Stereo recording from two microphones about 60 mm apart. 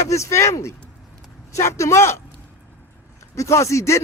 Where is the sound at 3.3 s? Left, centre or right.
Left.